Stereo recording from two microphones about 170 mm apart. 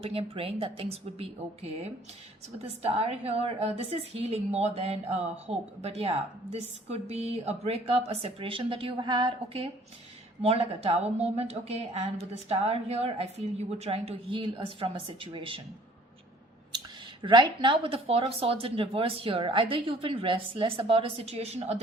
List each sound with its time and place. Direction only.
0.0 s a woman's voice: 35° right (ahead or behind)
17.2 s a woman's voice: 30° right (ahead or behind)